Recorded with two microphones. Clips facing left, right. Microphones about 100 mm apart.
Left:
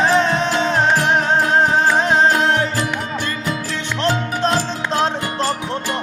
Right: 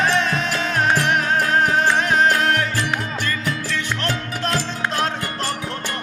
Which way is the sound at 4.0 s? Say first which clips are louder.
Left 6 dB; 25° left (ahead or behind).